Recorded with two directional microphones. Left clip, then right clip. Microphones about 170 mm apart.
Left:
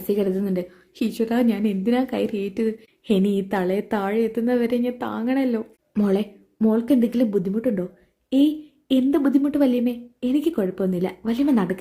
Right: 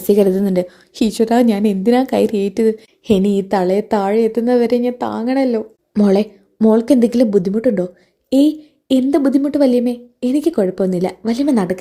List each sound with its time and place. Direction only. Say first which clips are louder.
0.1 s a woman's voice: right 10 dB; 35° right (ahead or behind); by 6.1 s 15° right (ahead or behind)
6.1 s a woman's voice: right 8 dB; 30° right (ahead or behind)